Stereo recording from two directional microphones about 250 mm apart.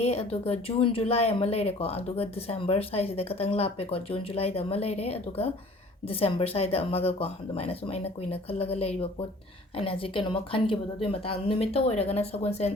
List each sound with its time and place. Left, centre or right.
0.0 s speech: left